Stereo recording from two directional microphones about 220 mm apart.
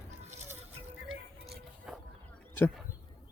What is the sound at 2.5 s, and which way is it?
Speech, 10° left (ahead or behind).